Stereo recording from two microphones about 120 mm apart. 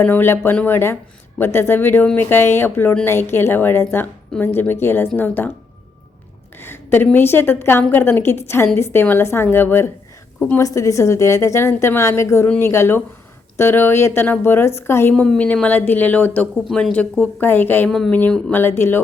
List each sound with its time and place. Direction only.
0.0 s a woman's voice: 15° left (ahead or behind)
6.6 s a woman's voice: 20° left (ahead or behind)
15.1 s speech: 5° left (ahead or behind)
16.6 s speech: centre (ahead or behind)
17.9 s speech: 5° left (ahead or behind)
18.5 s a woman's voice: 20° left (ahead or behind)